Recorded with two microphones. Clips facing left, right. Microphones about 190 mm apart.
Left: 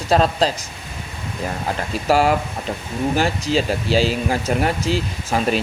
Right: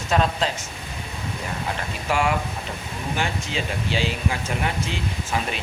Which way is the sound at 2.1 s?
35° left (ahead or behind).